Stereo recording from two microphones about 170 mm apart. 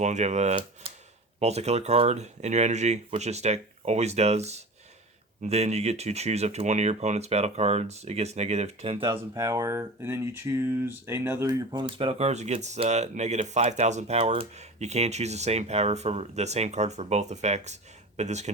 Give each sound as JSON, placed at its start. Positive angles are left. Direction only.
{"t": 0.0, "sound": "speech", "side_deg": -40}
{"t": 0.8, "sound": "a sound", "side_deg": -35}
{"t": 1.4, "sound": "speech", "side_deg": -40}
{"t": 9.1, "sound": "speech", "side_deg": -20}
{"t": 11.7, "sound": "speech", "side_deg": -30}